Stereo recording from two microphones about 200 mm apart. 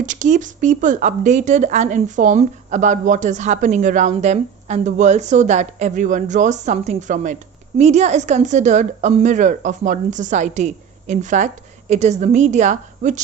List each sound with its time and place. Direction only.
0.0 s speech: 40° right (ahead or behind)